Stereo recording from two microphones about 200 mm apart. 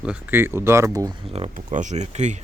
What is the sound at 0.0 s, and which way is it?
Speech, 10° right (ahead or behind).